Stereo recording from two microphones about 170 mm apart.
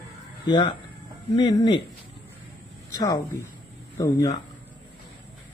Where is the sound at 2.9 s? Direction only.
20° left (ahead or behind).